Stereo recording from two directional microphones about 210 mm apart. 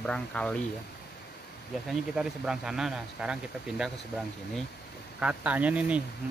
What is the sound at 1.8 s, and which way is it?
Speech, 5° right (ahead or behind).